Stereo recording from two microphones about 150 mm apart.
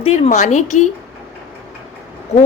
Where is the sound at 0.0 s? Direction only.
45° left (ahead or behind).